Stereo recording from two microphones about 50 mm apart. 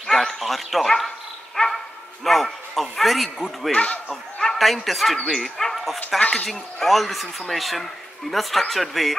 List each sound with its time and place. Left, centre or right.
0.0 s dog: centre
2.2 s speech: centre
3.7 s speech: left
4.4 s speech: centre